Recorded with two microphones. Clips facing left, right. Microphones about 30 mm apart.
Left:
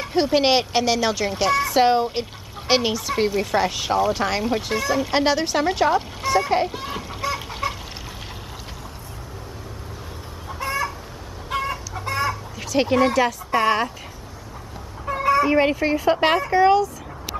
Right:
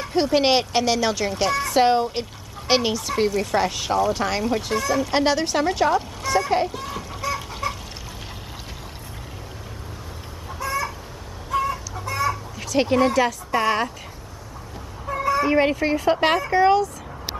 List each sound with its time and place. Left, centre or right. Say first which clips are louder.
0.0 s a child's voice: left 1 dB; centre
6.8 s chicken: left 1 dB; left
10.6 s chicken: left 1 dB; left
12.5 s a sound: left 2 dB; centre
13.0 s a child's voice: even; centre
15.4 s a child's voice: left 1 dB; centre